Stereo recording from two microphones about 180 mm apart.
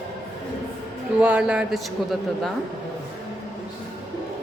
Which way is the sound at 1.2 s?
5° right (ahead or behind).